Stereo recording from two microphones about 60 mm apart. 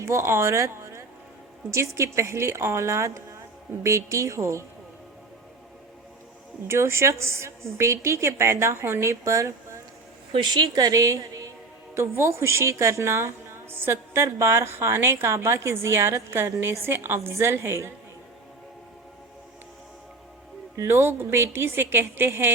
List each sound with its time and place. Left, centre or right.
0.0 s a woman's voice: right
6.7 s a woman's voice: right
10.8 s speech: right
11.9 s a woman's voice: right
20.7 s a woman's voice: right